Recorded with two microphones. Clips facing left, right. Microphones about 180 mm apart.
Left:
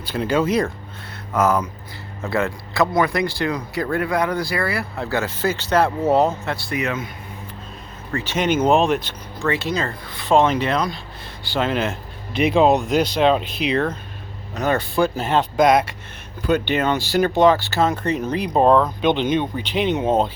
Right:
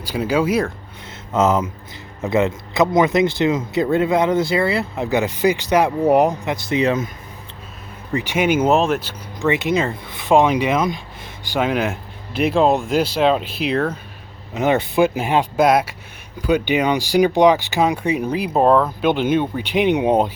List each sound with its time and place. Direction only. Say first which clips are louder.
0.0 s speech: right 1 dB; 10° right (ahead or behind)
1.3 s speech: right 2 dB; 20° right (ahead or behind)
6.7 s speech: right 8 dB; 35° right (ahead or behind)
8.1 s speech: right 2 dB; 15° right (ahead or behind)
9.4 s speech: right 4 dB; 20° right (ahead or behind)
11.9 s speech: right 1 dB; centre (ahead or behind)
14.5 s speech: right 3 dB; 20° right (ahead or behind)